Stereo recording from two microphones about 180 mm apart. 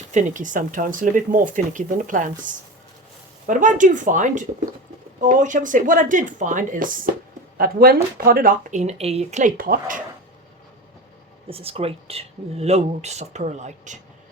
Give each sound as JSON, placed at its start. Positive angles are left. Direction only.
{"t": 0.1, "sound": "speech", "side_deg": -40}
{"t": 11.4, "sound": "speech", "side_deg": -30}